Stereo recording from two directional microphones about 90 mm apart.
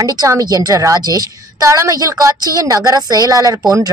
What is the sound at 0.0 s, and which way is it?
A woman's voice, 40° right (ahead or behind).